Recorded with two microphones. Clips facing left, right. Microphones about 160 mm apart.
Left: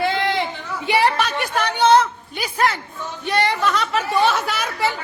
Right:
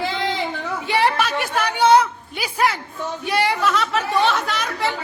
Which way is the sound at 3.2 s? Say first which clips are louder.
Left 1 dB; 10° right (ahead or behind).